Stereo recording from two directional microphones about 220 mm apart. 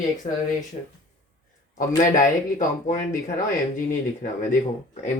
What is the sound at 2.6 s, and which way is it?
Speech, 35° left (ahead or behind).